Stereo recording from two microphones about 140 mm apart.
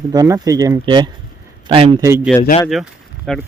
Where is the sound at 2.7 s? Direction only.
Centre (ahead or behind).